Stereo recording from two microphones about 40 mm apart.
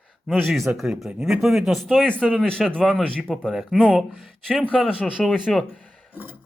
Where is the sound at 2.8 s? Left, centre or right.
Centre.